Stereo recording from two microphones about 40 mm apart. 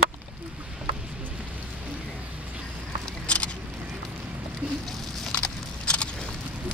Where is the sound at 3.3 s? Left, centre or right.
Left.